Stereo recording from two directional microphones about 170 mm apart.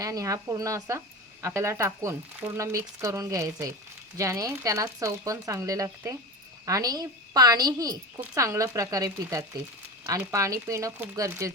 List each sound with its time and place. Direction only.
0.0 s speech: 20° right (ahead or behind)